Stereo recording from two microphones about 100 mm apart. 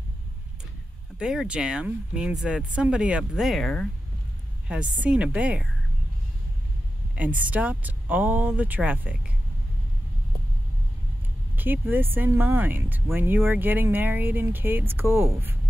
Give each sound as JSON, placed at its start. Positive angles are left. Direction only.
{"t": 1.1, "sound": "speech", "side_deg": -5}
{"t": 4.6, "sound": "speech", "side_deg": -10}
{"t": 7.2, "sound": "speech", "side_deg": -15}
{"t": 11.5, "sound": "speech", "side_deg": -20}